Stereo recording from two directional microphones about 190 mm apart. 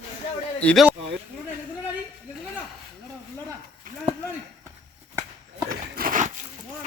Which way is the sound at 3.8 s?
45° right (ahead or behind).